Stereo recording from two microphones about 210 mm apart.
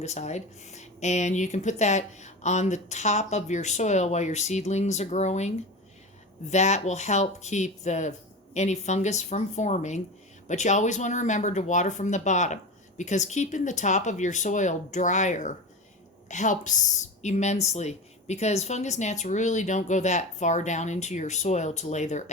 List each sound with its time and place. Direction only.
0.0 s speech: 30° left (ahead or behind)